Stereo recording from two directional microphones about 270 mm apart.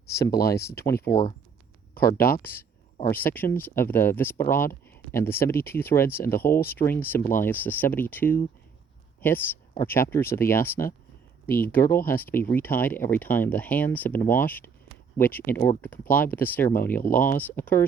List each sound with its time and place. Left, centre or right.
0.3 s speech: left
1.0 s speech: centre
7.2 s speech: left
7.4 s speech: centre